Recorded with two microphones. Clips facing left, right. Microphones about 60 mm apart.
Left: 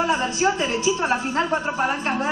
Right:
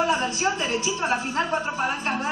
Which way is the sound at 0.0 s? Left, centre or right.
Left.